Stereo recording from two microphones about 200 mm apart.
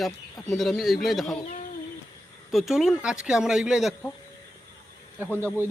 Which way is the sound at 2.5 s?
Centre (ahead or behind).